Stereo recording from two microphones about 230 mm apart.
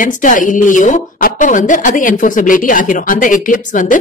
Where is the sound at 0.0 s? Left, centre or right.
Left.